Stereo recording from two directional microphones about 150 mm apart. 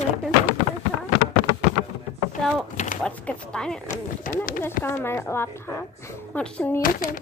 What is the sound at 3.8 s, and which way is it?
Speech, 60° left (ahead or behind).